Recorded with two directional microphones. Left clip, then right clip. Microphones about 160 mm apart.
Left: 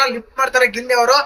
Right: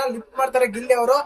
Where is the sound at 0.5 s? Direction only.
15° right (ahead or behind).